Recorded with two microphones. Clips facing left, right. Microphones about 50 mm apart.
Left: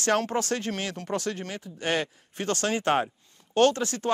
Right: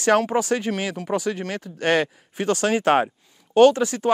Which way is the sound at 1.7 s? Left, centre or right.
Right.